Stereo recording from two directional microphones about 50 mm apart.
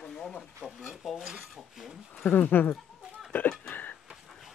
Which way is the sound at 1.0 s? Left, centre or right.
Centre.